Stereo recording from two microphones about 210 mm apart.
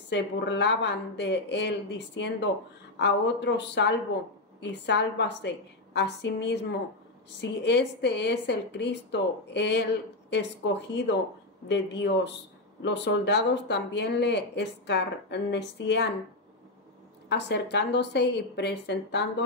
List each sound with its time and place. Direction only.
0.1 s speech: 55° left (ahead or behind)
17.3 s a woman's voice: 55° left (ahead or behind)